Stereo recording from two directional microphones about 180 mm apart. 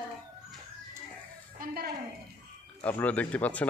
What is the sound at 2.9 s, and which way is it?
Speech, 10° left (ahead or behind).